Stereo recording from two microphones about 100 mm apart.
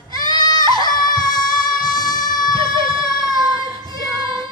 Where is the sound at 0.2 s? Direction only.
45° left (ahead or behind).